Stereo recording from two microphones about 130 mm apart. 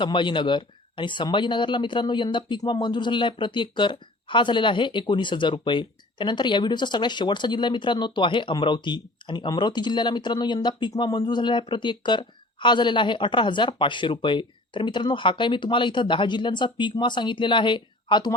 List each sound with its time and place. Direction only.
0.0 s speech: 35° left (ahead or behind)